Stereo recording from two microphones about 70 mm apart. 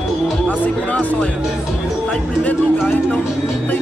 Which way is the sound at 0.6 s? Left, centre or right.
Left.